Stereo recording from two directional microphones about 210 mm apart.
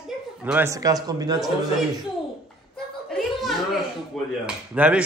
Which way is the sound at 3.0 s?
Centre (ahead or behind).